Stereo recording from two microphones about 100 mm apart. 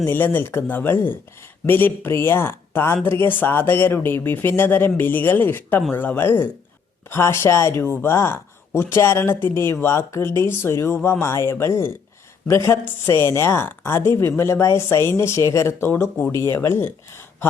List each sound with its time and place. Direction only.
0.0 s a woman's voice: 20° left (ahead or behind)